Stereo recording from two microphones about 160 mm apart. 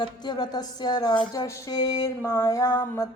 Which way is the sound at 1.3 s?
20° left (ahead or behind).